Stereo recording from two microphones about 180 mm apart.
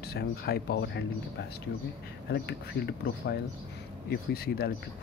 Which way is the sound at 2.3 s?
70° left (ahead or behind).